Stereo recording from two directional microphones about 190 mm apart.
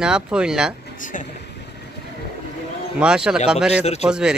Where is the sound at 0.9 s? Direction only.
45° left (ahead or behind).